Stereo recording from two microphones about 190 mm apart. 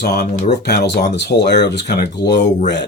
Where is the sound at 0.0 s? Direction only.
60° left (ahead or behind).